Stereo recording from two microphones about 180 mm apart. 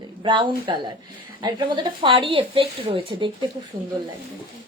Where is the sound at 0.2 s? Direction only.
25° right (ahead or behind).